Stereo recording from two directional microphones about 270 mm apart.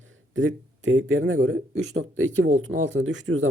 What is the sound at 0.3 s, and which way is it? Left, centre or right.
Speech, right.